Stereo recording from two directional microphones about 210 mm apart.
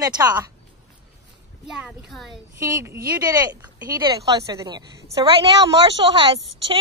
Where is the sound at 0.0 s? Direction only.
20° right (ahead or behind).